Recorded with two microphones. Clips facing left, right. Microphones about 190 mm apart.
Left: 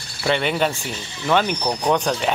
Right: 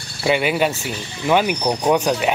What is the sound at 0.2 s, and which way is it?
Speech, 10° right (ahead or behind).